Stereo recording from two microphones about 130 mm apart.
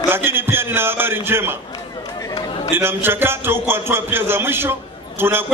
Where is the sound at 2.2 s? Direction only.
30° left (ahead or behind).